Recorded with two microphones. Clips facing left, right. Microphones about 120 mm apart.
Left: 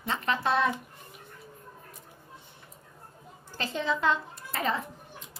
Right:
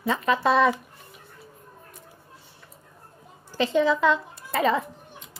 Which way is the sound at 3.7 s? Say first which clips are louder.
Right 6 dB; 90° right.